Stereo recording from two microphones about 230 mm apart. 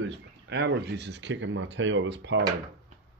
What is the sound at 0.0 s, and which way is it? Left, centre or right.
Speech, right.